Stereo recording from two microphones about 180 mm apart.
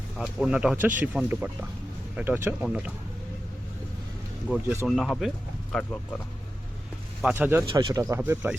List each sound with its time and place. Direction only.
0.2 s speech: 5° right (ahead or behind)
4.4 s speech: 5° right (ahead or behind)
7.2 s speech: 5° right (ahead or behind)
7.7 s speech: 30° right (ahead or behind); by 8.5 s 10° right (ahead or behind)